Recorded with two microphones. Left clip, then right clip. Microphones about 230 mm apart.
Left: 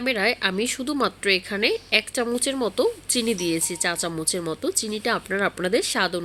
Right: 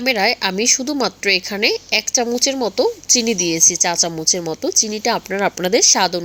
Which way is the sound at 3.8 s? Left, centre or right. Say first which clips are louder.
Right 8 dB; centre.